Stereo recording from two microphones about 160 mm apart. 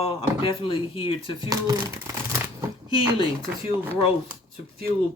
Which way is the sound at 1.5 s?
20° right (ahead or behind).